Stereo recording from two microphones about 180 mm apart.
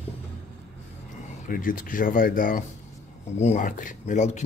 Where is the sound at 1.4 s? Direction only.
50° left (ahead or behind).